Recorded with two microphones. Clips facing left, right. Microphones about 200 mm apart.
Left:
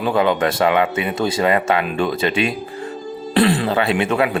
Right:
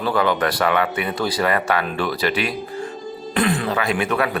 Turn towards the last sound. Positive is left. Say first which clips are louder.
# left 3 dB
turn(degrees=25)  # may be behind; listen again after turning